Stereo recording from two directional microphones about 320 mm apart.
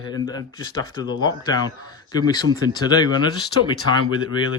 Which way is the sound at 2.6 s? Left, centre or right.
Centre.